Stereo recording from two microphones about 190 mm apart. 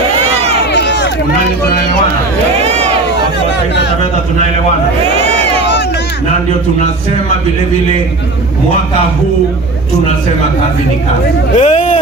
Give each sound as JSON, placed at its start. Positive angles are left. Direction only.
{"t": 0.7, "sound": "run", "side_deg": 70}
{"t": 11.5, "sound": "hubbub", "side_deg": 40}